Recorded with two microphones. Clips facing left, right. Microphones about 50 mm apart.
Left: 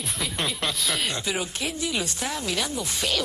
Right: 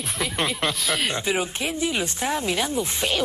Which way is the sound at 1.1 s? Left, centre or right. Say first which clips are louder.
Right 4 dB; right.